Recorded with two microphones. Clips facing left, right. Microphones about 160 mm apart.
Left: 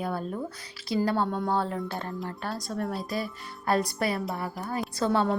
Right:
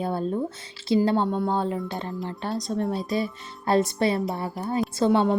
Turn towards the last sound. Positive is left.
turn(degrees=-25)  # may be behind; listen again after turning